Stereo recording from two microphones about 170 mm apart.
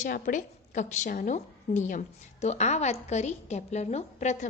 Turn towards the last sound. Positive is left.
turn(degrees=45)  # may be behind; listen again after turning